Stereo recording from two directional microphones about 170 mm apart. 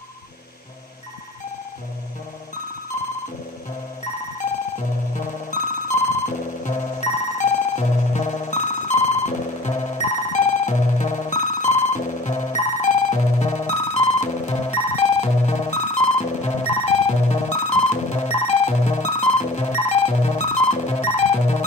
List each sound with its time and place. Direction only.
4.7 s music: 45° left (ahead or behind)